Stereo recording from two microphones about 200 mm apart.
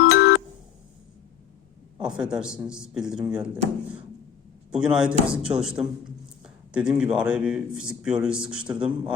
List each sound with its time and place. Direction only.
0.0 s music: 65° left (ahead or behind)
2.0 s a man's voice: 5° right (ahead or behind)
4.7 s a man's voice: 5° right (ahead or behind)